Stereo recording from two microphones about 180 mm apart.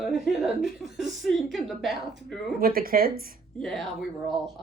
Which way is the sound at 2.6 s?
55° right (ahead or behind).